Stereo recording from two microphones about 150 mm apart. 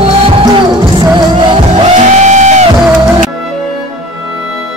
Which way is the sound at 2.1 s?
50° right (ahead or behind).